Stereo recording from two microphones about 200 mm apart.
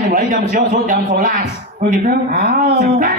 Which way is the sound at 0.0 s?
40° right (ahead or behind).